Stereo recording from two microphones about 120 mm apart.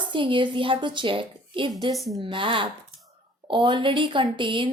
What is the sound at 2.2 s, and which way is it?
A woman's voice, 45° right (ahead or behind).